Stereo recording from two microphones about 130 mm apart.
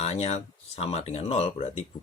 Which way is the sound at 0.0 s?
50° left (ahead or behind).